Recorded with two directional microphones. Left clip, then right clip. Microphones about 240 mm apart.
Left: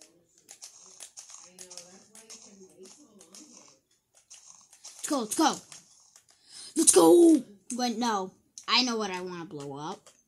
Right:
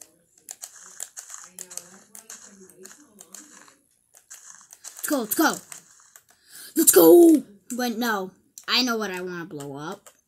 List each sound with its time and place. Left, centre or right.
1.1 s a sound: centre
4.3 s crumpling: centre
6.5 s speech: centre